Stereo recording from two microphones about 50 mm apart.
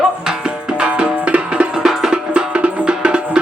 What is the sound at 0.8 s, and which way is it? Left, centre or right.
Music, right.